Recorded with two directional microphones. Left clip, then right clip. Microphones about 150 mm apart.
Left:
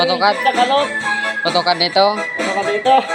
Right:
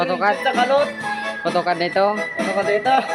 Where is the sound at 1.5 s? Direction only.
15° right (ahead or behind).